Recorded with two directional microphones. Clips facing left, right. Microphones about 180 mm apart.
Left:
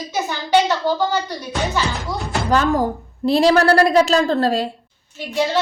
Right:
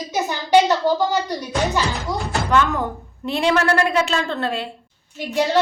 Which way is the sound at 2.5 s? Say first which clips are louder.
Left 3 dB; 35° left (ahead or behind).